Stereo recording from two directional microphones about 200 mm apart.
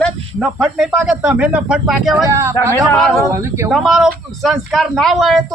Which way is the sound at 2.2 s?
15° right (ahead or behind).